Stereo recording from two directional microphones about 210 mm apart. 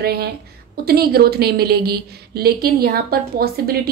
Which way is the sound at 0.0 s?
50° right (ahead or behind).